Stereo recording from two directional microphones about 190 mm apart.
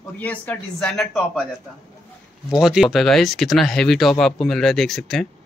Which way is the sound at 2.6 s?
Centre (ahead or behind).